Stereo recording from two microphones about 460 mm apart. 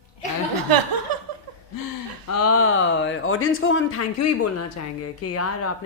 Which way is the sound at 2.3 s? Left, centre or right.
Left.